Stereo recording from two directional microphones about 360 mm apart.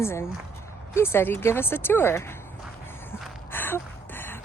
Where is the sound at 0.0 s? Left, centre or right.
Centre.